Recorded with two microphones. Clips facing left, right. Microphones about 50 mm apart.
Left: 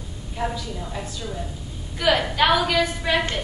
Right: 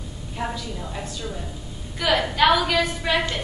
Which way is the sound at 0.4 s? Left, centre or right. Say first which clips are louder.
Left 2 dB; centre.